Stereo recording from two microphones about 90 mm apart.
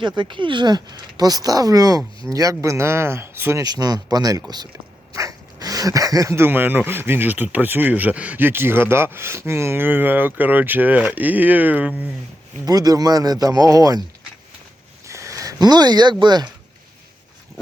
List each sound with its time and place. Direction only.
0.0 s speech: 60° right (ahead or behind); by 3.6 s 25° right (ahead or behind)
3.6 s speech: 45° right (ahead or behind); by 12.0 s 15° right (ahead or behind)
12.6 s speech: 45° right (ahead or behind)
15.0 s speech: 35° right (ahead or behind); by 16.5 s 50° right (ahead or behind)